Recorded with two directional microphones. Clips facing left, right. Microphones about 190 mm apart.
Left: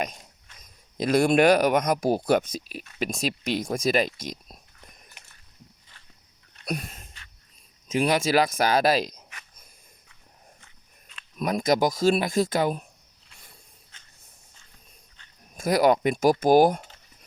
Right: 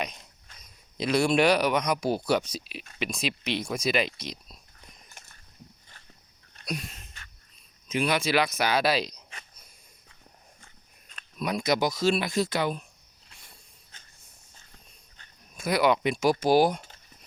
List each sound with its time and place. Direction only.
0.5 s speech: 45° left (ahead or behind)
5.0 s a sound: 45° right (ahead or behind)
6.7 s a sound: 50° left (ahead or behind)
7.9 s speech: 40° left (ahead or behind)
11.3 s speech: 50° left (ahead or behind)
15.5 s speech: 45° left (ahead or behind)